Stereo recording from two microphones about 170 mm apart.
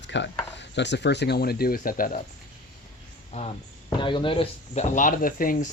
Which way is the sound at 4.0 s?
30° left (ahead or behind).